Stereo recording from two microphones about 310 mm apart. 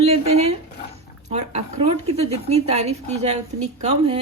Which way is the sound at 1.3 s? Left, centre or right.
Right.